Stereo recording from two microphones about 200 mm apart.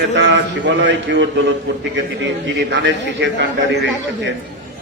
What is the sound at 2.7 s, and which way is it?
Speech, 60° right (ahead or behind).